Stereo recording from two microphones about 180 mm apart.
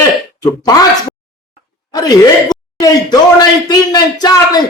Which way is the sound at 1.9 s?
20° left (ahead or behind).